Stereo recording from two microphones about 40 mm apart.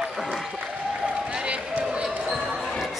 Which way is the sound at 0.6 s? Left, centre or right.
Right.